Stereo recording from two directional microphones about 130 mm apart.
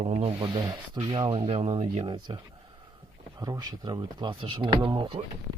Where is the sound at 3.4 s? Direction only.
30° right (ahead or behind).